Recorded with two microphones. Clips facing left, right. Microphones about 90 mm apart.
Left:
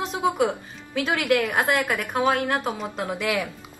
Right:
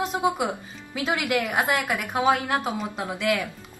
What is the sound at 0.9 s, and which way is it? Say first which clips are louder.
A woman's voice: left 3 dB; 10° right (ahead or behind).